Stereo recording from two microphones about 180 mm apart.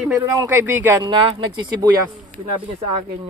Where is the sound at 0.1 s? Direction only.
10° right (ahead or behind).